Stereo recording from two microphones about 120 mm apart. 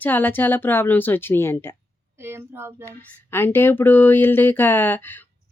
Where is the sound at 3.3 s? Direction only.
20° left (ahead or behind).